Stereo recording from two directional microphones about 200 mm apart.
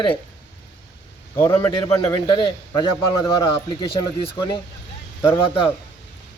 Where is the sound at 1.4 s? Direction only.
15° left (ahead or behind).